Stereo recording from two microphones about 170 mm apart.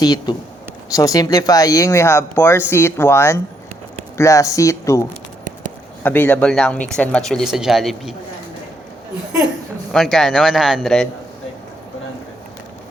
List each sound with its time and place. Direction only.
0.0 s speech: 25° left (ahead or behind); by 8.1 s centre (ahead or behind)
9.9 s speech: centre (ahead or behind)